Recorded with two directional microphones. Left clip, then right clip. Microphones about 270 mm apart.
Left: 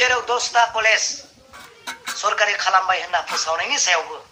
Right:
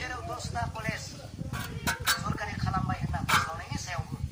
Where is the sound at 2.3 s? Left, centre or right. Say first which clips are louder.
Left 17 dB; left.